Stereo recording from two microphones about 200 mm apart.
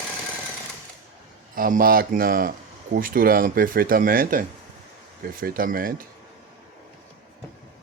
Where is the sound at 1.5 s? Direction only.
45° right (ahead or behind).